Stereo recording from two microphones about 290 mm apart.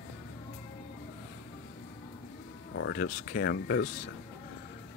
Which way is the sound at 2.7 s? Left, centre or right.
Left.